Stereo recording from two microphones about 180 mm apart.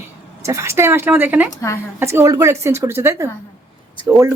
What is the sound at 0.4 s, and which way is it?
A woman's voice, 15° right (ahead or behind).